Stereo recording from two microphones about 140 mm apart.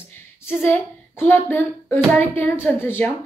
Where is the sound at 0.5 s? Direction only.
15° left (ahead or behind).